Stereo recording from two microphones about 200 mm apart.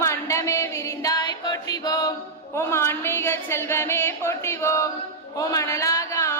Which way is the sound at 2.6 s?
15° left (ahead or behind).